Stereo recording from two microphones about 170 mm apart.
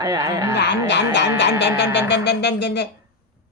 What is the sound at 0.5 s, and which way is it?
Speech, 90° left.